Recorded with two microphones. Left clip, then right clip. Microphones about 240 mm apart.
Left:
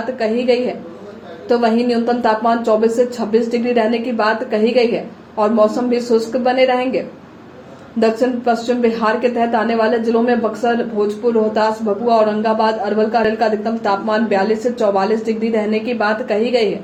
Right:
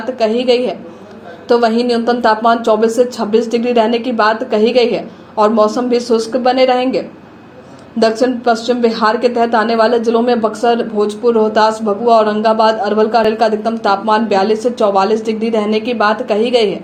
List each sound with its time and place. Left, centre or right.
0.2 s speech: right